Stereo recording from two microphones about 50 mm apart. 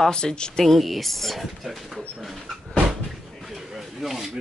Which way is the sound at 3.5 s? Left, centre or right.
Centre.